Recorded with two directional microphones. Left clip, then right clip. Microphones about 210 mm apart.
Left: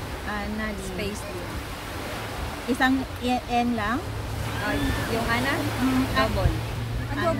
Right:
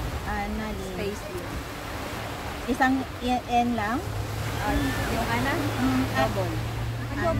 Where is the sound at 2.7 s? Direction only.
Centre (ahead or behind).